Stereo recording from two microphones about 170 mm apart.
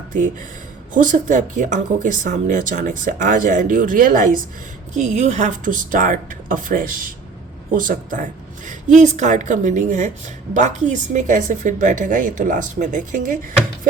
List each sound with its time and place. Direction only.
0.9 s a woman's voice: 50° right (ahead or behind)
4.9 s a woman's voice: 40° right (ahead or behind)